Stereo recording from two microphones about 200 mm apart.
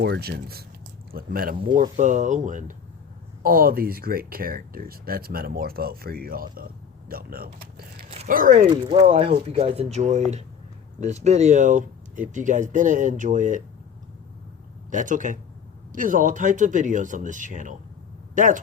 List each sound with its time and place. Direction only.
0.0 s speech: 55° right (ahead or behind)
8.1 s speech: 40° right (ahead or behind)
14.8 s speech: 40° right (ahead or behind)